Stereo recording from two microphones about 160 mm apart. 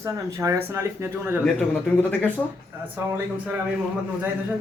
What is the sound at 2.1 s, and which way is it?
Speech, 10° left (ahead or behind).